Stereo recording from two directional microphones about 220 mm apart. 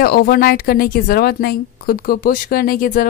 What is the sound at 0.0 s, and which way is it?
A woman's voice, 45° left (ahead or behind).